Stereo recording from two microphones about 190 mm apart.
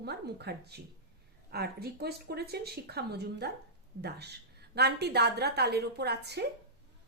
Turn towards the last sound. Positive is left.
turn(degrees=-60)  # may be behind; listen again after turning